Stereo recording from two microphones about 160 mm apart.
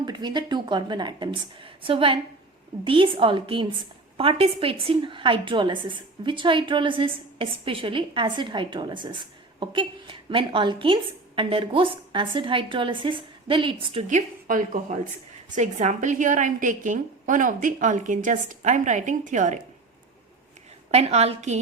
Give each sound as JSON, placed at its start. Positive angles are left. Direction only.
{"t": 0.0, "sound": "a woman's voice", "side_deg": -25}
{"t": 14.1, "sound": "a woman's voice", "side_deg": -50}
{"t": 20.9, "sound": "a woman's voice", "side_deg": -40}